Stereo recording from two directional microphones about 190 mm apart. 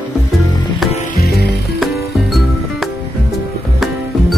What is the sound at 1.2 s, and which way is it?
Music, 55° left (ahead or behind).